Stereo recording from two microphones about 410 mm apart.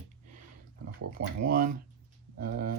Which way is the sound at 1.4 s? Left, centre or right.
Right.